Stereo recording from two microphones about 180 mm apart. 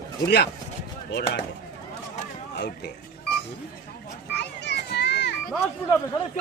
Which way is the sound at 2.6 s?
65° left (ahead or behind).